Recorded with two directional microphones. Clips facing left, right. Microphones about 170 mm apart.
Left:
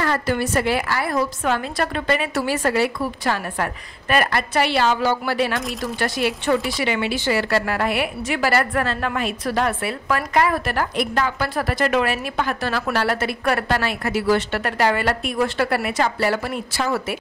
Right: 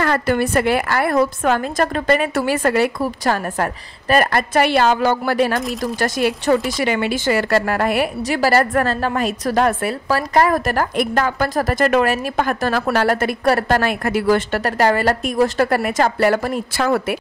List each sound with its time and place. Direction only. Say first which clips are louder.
0.0 s speech: right 4 dB; 60° right (ahead or behind)